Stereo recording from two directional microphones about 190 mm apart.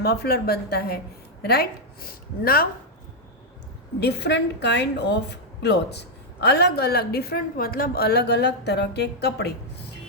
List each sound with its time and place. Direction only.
0.0 s a woman's voice: 55° left (ahead or behind)
4.0 s a woman's voice: 60° left (ahead or behind)